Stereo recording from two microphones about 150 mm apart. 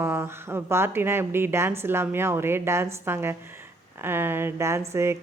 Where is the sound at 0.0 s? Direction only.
15° right (ahead or behind).